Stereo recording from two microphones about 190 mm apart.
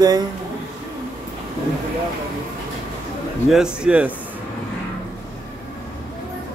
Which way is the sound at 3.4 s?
5° right (ahead or behind).